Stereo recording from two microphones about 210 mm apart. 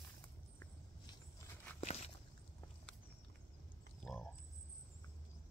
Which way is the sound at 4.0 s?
Centre (ahead or behind).